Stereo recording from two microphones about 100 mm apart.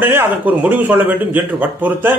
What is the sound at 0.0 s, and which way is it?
A man's voice, 20° right (ahead or behind).